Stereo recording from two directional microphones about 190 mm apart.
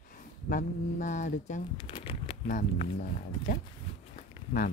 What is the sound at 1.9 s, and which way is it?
Speech, 25° left (ahead or behind).